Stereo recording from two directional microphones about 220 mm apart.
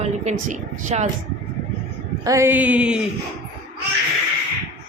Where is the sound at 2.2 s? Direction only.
15° right (ahead or behind).